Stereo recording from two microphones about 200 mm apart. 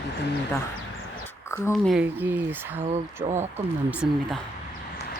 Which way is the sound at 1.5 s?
15° left (ahead or behind).